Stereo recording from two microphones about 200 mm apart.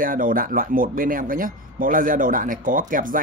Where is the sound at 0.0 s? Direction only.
45° right (ahead or behind).